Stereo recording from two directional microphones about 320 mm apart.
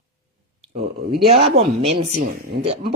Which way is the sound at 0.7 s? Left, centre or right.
Right.